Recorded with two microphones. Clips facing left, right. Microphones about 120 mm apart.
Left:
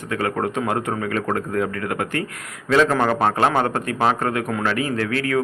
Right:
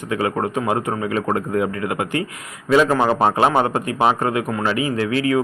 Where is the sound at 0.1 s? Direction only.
10° right (ahead or behind).